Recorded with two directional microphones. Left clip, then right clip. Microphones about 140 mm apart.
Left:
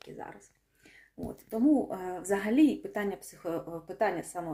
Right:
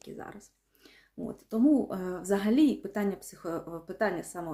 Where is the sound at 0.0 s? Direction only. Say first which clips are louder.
Even; 30° right (ahead or behind).